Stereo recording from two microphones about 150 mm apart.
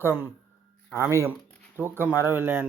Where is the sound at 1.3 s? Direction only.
10° left (ahead or behind).